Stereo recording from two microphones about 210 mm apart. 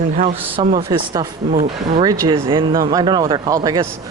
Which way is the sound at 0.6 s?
25° right (ahead or behind).